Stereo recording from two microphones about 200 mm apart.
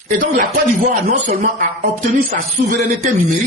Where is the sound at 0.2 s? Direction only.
40° right (ahead or behind).